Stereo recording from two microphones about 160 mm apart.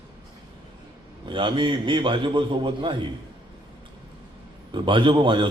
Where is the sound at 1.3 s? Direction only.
30° right (ahead or behind).